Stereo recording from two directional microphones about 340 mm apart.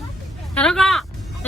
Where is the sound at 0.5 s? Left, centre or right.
Centre.